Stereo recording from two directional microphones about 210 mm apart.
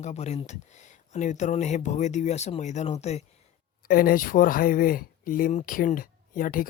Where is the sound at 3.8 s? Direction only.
45° left (ahead or behind).